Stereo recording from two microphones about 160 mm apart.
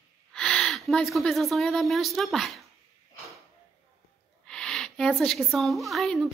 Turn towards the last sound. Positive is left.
turn(degrees=0)  # may be behind; listen again after turning